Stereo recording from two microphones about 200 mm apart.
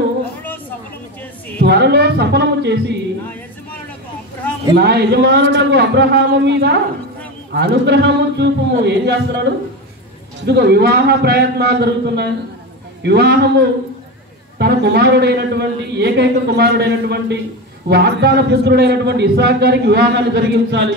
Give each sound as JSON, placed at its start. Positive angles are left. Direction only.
{"t": 1.6, "sound": "a man's voice", "side_deg": -55}
{"t": 4.7, "sound": "a man's voice", "side_deg": -55}